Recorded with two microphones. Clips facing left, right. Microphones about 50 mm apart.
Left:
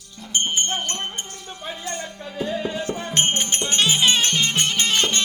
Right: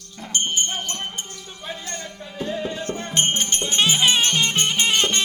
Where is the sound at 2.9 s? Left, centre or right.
Centre.